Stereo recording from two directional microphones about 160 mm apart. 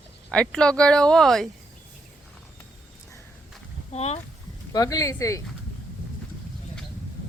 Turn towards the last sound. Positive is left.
turn(degrees=20)  # may be behind; listen again after turning